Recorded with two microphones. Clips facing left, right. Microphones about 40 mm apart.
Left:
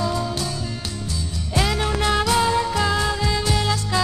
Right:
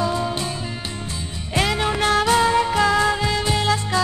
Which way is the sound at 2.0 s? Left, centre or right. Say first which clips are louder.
Right 2 dB; right.